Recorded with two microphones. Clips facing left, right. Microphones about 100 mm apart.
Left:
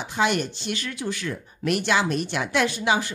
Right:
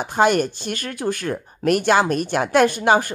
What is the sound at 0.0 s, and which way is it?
Speech, 45° right (ahead or behind).